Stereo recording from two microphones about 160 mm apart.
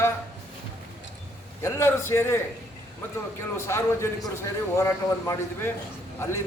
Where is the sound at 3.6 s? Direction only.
15° left (ahead or behind).